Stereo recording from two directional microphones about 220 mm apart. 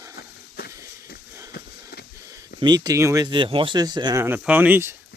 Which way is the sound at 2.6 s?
20° right (ahead or behind).